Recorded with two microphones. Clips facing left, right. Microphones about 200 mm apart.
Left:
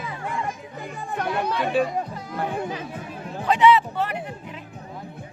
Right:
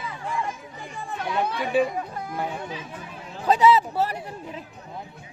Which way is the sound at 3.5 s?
35° right (ahead or behind).